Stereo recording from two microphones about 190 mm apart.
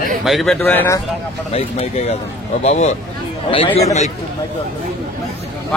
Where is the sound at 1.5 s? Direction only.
30° left (ahead or behind).